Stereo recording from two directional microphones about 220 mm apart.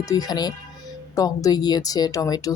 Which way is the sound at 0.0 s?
15° left (ahead or behind).